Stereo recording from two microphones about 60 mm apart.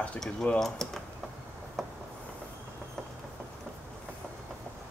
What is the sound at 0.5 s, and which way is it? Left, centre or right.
Speech, centre.